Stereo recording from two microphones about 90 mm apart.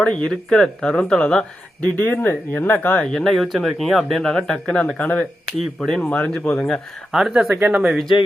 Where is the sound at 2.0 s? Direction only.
20° left (ahead or behind).